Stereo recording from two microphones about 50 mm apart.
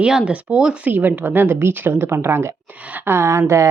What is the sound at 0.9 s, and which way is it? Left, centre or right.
Speech, right.